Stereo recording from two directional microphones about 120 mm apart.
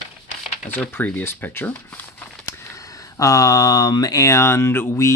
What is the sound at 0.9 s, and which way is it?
Speech, 15° left (ahead or behind).